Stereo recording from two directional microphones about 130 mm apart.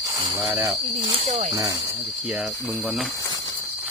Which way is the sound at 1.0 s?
50° right (ahead or behind).